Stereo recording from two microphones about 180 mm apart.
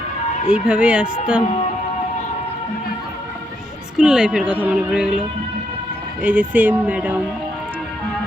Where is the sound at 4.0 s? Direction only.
5° right (ahead or behind).